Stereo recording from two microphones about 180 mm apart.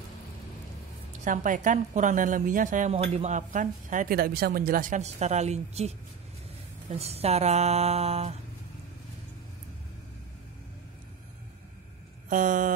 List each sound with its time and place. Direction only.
1.2 s speech: 45° right (ahead or behind)
12.3 s speech: 45° right (ahead or behind)